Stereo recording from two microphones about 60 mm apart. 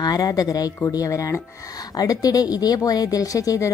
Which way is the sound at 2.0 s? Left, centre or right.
Left.